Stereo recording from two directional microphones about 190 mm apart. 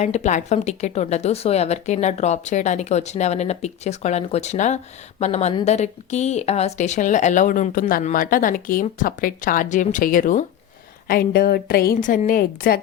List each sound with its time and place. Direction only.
0.0 s speech: 35° left (ahead or behind)